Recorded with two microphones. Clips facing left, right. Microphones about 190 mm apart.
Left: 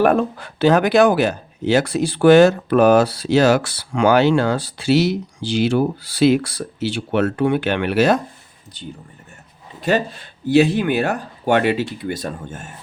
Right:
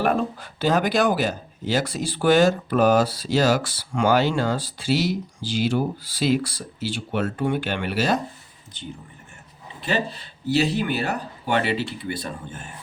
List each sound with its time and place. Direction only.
0.0 s speech: 60° left (ahead or behind)
9.8 s speech: 50° left (ahead or behind)